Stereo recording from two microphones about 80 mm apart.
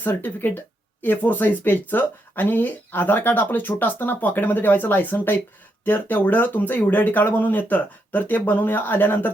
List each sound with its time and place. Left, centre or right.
0.0 s speech: left